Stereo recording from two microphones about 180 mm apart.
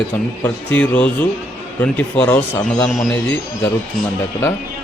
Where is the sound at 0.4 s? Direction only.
10° left (ahead or behind).